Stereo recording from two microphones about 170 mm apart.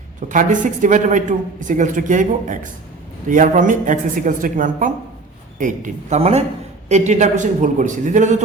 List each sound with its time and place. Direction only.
0.3 s speech: 50° right (ahead or behind)